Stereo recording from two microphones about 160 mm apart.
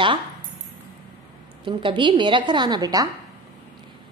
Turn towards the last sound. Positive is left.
turn(degrees=-25)  # may be behind; listen again after turning